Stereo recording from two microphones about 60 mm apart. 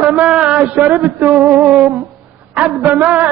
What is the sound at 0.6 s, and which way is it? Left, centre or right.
Speech, centre.